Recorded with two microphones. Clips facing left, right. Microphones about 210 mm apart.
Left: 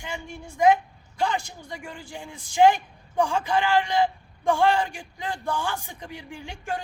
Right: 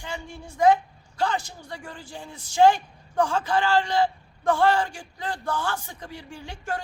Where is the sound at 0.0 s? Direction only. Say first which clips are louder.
Even; 20° left (ahead or behind).